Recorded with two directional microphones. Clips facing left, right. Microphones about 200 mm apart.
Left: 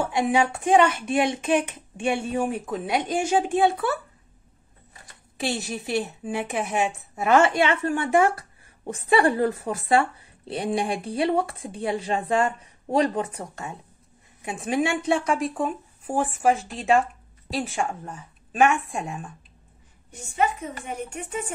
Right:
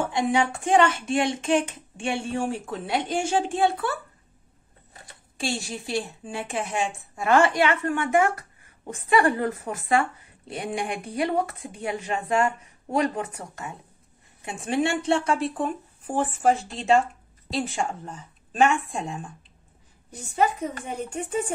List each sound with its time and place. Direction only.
0.2 s a woman's voice: 20° left (ahead or behind)
5.4 s a woman's voice: 20° left (ahead or behind)
14.8 s speech: 15° left (ahead or behind)
20.1 s speech: 35° right (ahead or behind)